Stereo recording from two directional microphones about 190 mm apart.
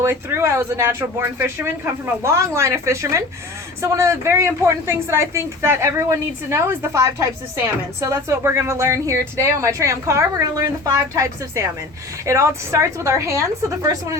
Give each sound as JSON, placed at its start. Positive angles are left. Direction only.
{"t": 0.0, "sound": "a woman's voice", "side_deg": -15}